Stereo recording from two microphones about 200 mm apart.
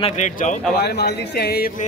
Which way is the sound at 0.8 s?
55° left (ahead or behind).